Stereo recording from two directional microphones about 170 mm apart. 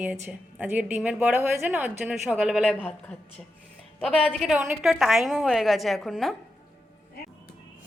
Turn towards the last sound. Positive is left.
turn(degrees=0)  # may be behind; listen again after turning